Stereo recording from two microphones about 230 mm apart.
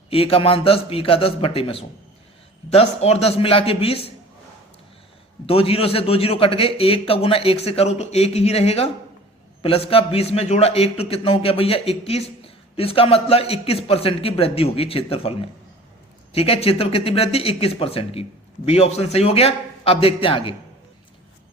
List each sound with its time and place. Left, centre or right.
0.1 s speech: left
5.5 s speech: left